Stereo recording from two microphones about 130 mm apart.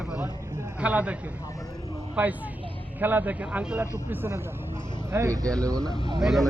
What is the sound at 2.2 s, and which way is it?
A man's voice, 10° right (ahead or behind).